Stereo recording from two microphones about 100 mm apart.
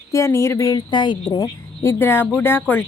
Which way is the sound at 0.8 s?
50° left (ahead or behind).